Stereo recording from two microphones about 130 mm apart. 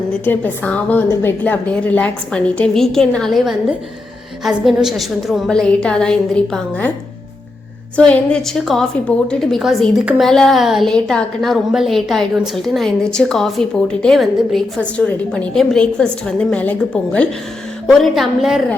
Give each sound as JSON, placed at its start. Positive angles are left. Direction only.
{"t": 0.1, "sound": "a woman's voice", "side_deg": 10}
{"t": 7.9, "sound": "a woman's voice", "side_deg": 10}